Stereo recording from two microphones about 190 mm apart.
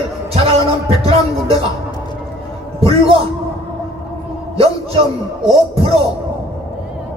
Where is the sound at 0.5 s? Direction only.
30° right (ahead or behind).